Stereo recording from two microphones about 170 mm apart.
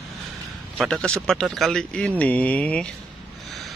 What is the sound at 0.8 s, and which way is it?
Speech, 5° left (ahead or behind).